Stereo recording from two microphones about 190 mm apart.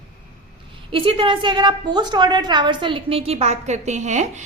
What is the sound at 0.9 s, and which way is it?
A woman's voice, 30° right (ahead or behind).